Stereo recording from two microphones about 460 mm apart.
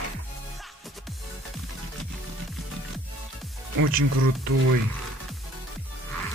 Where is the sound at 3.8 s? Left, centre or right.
Right.